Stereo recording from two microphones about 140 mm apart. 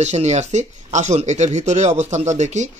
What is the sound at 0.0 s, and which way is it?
Speech, 55° right (ahead or behind).